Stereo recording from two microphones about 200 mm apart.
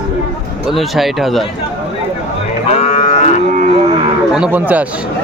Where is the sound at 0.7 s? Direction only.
Centre (ahead or behind).